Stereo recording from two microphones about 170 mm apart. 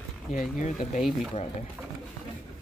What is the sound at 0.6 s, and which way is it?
Speech, 45° left (ahead or behind).